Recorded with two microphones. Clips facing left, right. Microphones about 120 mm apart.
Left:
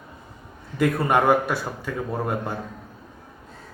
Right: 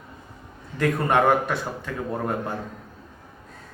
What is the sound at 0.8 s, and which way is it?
A man's voice, 10° left (ahead or behind).